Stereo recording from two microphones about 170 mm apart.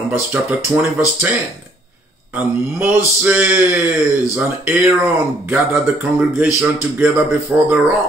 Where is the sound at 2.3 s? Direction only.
10° right (ahead or behind).